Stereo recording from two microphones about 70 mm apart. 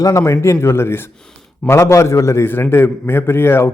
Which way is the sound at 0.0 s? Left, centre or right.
Left.